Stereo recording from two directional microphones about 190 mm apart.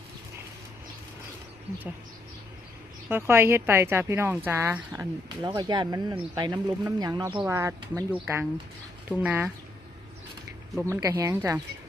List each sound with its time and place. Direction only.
3.1 s speech: 10° right (ahead or behind)
5.5 s speech: 25° right (ahead or behind)
10.8 s speech: 15° right (ahead or behind)